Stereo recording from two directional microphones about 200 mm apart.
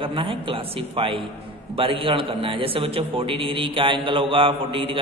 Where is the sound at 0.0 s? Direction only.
25° right (ahead or behind).